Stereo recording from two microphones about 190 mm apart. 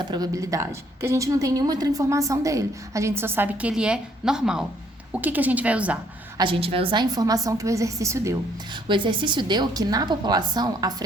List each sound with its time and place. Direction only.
0.0 s a woman's voice: 20° right (ahead or behind)
6.3 s a woman's voice: 25° right (ahead or behind)